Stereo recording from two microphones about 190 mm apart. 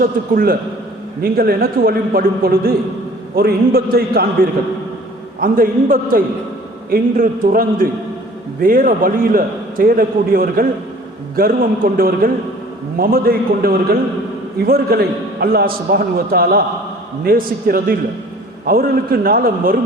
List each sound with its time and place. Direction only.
0.0 s a man's voice: 50° right (ahead or behind)
5.4 s a man's voice: 50° right (ahead or behind)